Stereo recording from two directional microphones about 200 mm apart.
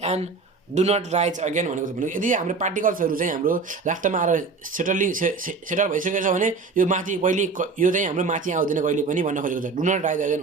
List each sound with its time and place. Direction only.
0.0 s speech: 30° right (ahead or behind)